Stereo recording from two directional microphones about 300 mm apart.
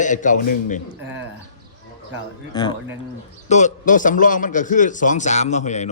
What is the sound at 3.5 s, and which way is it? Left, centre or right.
A man's voice, left.